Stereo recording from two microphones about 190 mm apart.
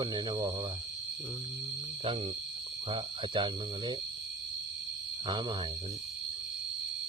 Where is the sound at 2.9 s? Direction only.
25° right (ahead or behind).